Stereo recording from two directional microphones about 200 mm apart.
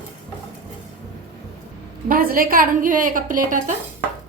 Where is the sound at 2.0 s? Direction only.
45° right (ahead or behind).